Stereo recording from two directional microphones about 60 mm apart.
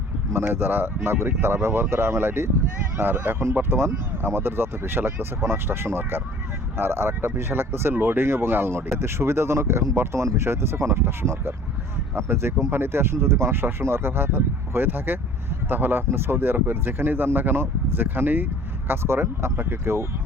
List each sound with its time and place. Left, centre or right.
0.4 s speech: right